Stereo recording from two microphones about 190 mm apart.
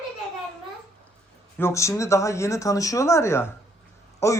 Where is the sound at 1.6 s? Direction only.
15° left (ahead or behind).